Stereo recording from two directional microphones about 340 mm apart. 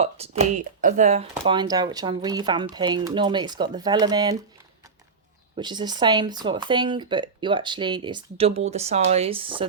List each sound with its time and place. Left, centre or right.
0.0 s speech: centre
5.5 s speech: centre